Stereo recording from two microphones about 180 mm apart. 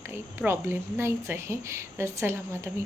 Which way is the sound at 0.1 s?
10° right (ahead or behind).